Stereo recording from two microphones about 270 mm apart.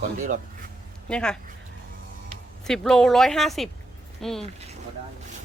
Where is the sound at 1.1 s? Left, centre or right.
Centre.